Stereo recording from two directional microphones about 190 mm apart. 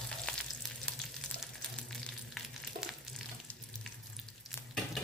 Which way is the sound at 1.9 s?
Centre (ahead or behind).